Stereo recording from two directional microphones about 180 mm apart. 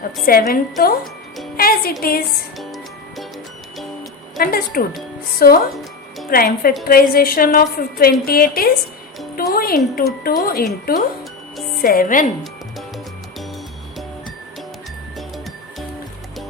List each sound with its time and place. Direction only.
0.3 s a woman's voice: 55° left (ahead or behind)
2.6 s music: centre (ahead or behind)
4.4 s a woman's voice: 55° left (ahead or behind)